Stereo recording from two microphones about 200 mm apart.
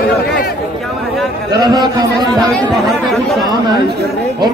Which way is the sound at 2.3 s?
5° left (ahead or behind).